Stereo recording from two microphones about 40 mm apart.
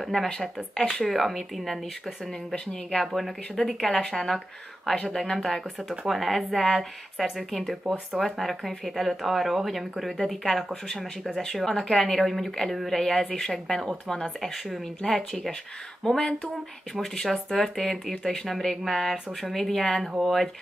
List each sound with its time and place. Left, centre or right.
0.0 s speech: centre
2.5 s speech: left
3.2 s speech: centre
5.9 s speech: centre